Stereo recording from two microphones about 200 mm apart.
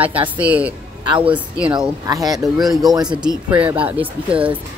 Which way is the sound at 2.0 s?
20° right (ahead or behind).